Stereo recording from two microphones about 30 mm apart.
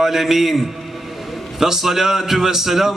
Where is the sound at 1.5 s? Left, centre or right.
Centre.